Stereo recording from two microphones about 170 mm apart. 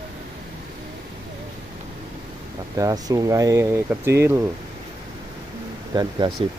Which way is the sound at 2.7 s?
20° right (ahead or behind).